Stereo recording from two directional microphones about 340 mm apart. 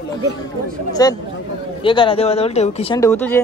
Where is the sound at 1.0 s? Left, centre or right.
Centre.